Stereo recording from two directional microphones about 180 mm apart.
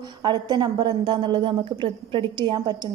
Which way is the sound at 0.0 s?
25° right (ahead or behind).